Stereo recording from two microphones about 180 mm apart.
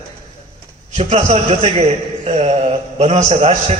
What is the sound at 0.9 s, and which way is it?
A man's voice, 35° right (ahead or behind).